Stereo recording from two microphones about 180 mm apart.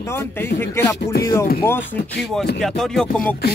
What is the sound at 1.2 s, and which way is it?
Speech, 15° left (ahead or behind).